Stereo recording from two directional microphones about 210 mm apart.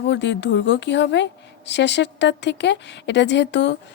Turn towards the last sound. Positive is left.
turn(degrees=55)  # may be behind; listen again after turning